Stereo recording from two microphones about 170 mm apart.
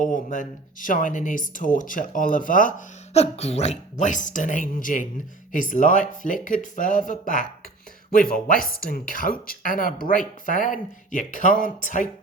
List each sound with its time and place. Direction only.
0.0 s speech: 50° left (ahead or behind)